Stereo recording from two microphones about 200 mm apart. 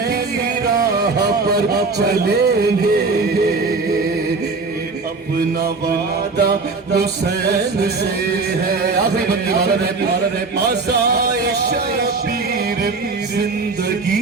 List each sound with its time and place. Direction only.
1.2 s speech: 50° right (ahead or behind)
6.3 s speech: 55° right (ahead or behind)
8.6 s speech: 50° right (ahead or behind)